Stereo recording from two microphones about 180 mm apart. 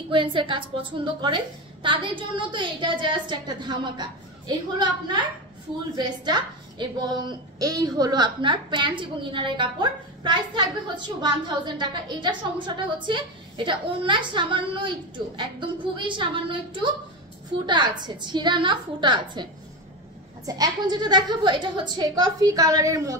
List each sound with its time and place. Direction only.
0.1 s a woman's voice: 30° right (ahead or behind)
20.4 s a woman's voice: 20° right (ahead or behind)